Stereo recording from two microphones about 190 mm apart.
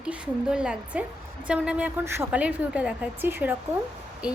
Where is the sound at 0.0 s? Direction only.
5° right (ahead or behind).